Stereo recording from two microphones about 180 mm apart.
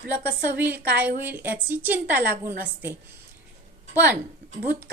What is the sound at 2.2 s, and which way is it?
Speech, 60° right (ahead or behind).